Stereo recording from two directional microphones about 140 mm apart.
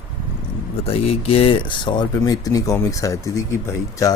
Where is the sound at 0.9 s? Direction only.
45° left (ahead or behind).